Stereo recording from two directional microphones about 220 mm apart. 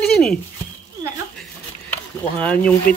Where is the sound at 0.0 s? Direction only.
5° left (ahead or behind).